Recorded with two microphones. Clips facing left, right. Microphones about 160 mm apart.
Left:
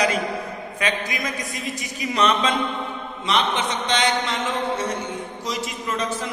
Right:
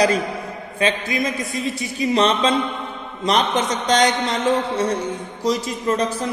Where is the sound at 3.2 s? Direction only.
40° right (ahead or behind).